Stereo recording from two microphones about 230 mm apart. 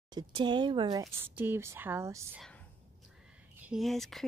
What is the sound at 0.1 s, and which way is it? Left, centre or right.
Speech, centre.